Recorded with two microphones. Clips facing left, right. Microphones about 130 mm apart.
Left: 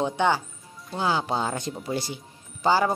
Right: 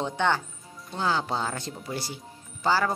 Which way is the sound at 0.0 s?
10° left (ahead or behind).